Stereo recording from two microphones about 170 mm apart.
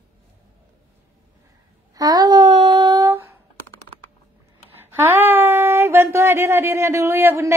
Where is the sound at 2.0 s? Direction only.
25° right (ahead or behind).